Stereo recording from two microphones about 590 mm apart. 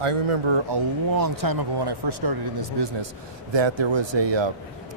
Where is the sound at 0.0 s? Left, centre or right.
Right.